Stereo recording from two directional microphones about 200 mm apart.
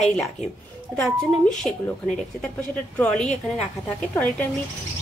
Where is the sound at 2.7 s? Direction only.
5° left (ahead or behind).